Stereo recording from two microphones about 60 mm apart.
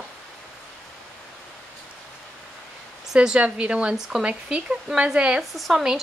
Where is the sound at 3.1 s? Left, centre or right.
Centre.